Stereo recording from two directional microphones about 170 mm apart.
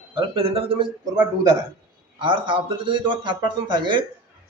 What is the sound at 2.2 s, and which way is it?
Speech, 30° right (ahead or behind).